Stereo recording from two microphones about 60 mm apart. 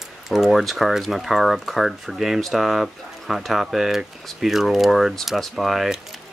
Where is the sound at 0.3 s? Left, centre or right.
Centre.